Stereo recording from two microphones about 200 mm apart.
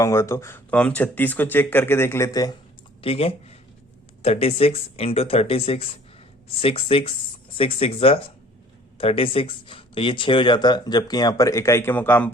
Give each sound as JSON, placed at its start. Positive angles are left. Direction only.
{"t": 0.0, "sound": "speech", "side_deg": 15}
{"t": 3.0, "sound": "speech", "side_deg": 30}